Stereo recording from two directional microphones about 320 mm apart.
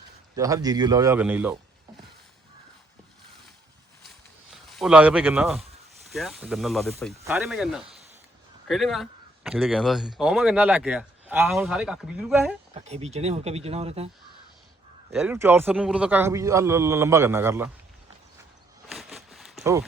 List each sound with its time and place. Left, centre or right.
0.3 s a man's voice: centre
4.5 s speech: centre
12.7 s speech: centre
15.1 s a man's voice: centre
18.9 s a sound: centre